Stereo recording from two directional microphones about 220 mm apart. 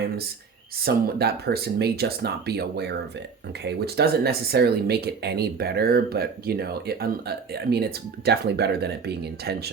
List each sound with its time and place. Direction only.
0.9 s speech: 45° right (ahead or behind)